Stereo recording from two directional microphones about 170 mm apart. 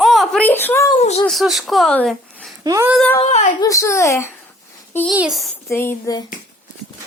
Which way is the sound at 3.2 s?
40° left (ahead or behind).